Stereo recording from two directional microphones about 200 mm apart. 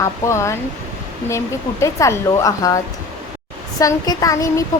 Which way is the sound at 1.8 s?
15° left (ahead or behind).